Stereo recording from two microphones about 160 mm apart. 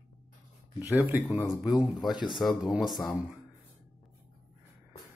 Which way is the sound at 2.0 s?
Centre (ahead or behind).